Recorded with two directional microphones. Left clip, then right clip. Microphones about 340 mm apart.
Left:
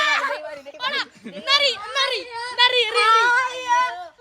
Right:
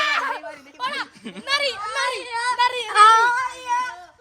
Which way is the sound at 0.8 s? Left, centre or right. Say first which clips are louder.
Left 1 dB; centre.